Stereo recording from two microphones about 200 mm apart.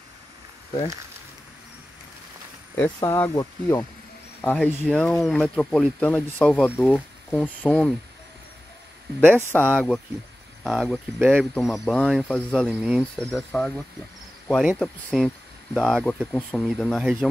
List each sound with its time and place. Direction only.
2.8 s speech: 15° left (ahead or behind)
9.2 s speech: 5° left (ahead or behind)
14.8 s speech: 5° left (ahead or behind)